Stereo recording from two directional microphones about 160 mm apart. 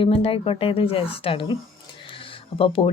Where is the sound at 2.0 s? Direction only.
30° left (ahead or behind).